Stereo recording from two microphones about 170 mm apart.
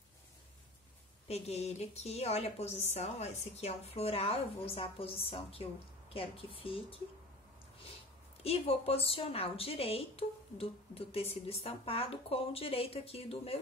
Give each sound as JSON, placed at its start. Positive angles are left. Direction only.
{"t": 1.2, "sound": "a woman's voice", "side_deg": 40}
{"t": 8.5, "sound": "a woman's voice", "side_deg": 35}